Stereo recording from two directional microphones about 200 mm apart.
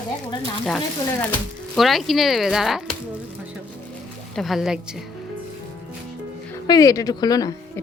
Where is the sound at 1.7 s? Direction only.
Centre (ahead or behind).